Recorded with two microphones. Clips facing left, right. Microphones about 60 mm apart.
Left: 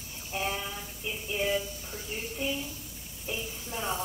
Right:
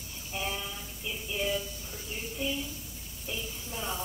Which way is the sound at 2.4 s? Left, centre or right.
Left.